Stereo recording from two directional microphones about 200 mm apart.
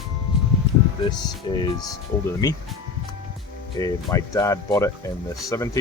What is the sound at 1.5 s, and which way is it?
Speech, 25° left (ahead or behind).